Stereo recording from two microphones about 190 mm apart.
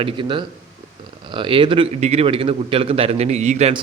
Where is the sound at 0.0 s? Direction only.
25° right (ahead or behind).